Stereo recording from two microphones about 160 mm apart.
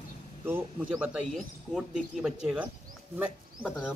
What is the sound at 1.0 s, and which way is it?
Speech, 5° right (ahead or behind).